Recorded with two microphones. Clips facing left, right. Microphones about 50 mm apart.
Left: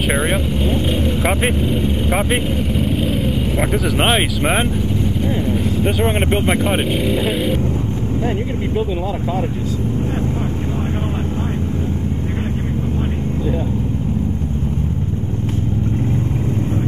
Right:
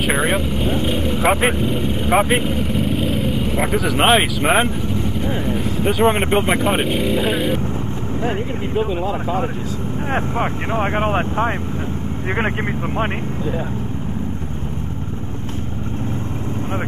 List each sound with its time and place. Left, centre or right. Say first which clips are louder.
0.1 s speech: even; centre